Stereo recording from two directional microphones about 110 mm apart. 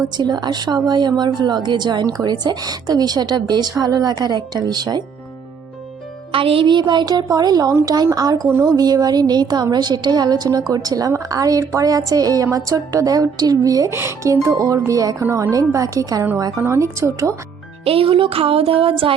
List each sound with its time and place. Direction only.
0.2 s speech: 40° right (ahead or behind)
6.3 s speech: 55° right (ahead or behind); by 8.4 s 35° right (ahead or behind)
8.4 s speech: 25° right (ahead or behind)
8.7 s speech: 35° right (ahead or behind)
13.9 s speech: 20° right (ahead or behind)
17.8 s a sound: 55° right (ahead or behind)